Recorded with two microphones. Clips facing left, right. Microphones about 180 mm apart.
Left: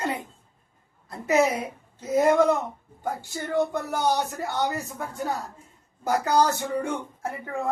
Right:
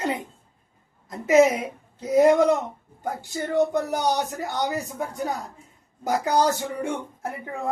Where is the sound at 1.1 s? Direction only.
20° right (ahead or behind).